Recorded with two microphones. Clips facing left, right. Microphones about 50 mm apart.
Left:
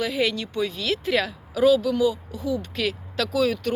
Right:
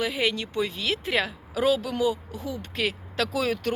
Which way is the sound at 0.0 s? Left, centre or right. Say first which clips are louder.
Left 2 dB; right.